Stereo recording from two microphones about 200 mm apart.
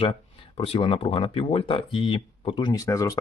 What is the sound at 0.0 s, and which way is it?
Speech, 30° left (ahead or behind).